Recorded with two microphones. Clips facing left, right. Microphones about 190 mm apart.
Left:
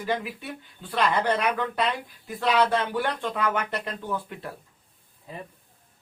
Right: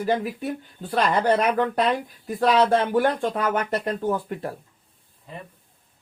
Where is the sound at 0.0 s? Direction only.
40° right (ahead or behind).